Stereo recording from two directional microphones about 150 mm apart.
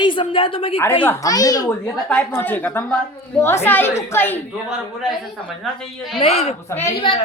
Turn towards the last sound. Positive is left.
turn(degrees=35)  # may be behind; listen again after turning